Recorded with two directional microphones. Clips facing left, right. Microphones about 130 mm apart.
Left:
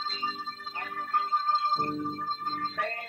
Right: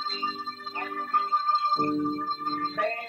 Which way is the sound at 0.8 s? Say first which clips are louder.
Right 2 dB; 40° right (ahead or behind).